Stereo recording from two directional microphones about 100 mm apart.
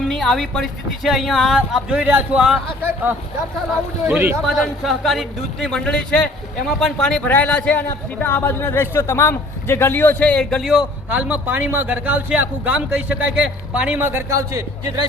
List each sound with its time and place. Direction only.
0.1 s a man's voice: centre (ahead or behind)
4.0 s a man's voice: 20° right (ahead or behind)
4.4 s a man's voice: centre (ahead or behind)
7.3 s a man's voice: 15° left (ahead or behind)
10.6 s a man's voice: 5° right (ahead or behind); by 14.9 s 30° right (ahead or behind)